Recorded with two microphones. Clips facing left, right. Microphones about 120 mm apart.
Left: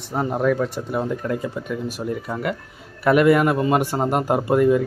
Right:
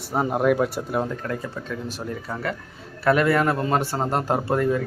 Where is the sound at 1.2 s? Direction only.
15° left (ahead or behind).